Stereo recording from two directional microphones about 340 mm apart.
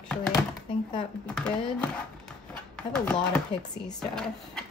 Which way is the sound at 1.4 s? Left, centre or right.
Centre.